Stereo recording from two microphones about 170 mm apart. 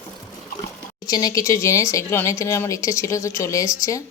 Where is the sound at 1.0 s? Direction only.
20° left (ahead or behind).